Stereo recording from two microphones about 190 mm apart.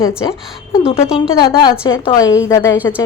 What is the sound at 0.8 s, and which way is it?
A woman's voice, 30° left (ahead or behind).